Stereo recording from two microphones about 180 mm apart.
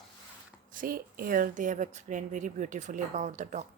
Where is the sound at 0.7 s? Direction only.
50° right (ahead or behind).